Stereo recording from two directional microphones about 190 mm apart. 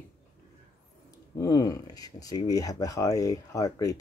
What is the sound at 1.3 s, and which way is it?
Speech, 20° left (ahead or behind).